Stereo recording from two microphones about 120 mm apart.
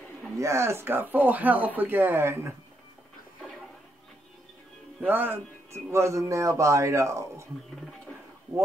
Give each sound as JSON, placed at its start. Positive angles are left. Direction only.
{"t": 0.4, "sound": "speech", "side_deg": -25}
{"t": 5.0, "sound": "speech", "side_deg": -15}